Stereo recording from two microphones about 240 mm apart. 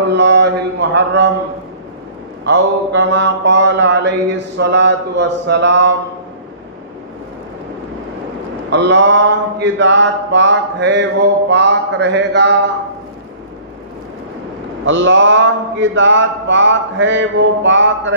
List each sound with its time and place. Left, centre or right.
0.1 s speech: right
2.4 s mantra: right
8.6 s mantra: right
14.9 s mantra: right